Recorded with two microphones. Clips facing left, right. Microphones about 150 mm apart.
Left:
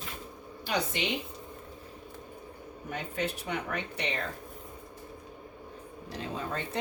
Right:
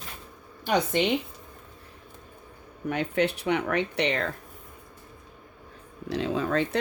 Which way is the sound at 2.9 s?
70° right (ahead or behind).